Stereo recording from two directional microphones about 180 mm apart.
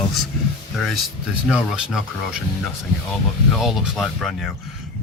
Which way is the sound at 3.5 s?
Centre (ahead or behind).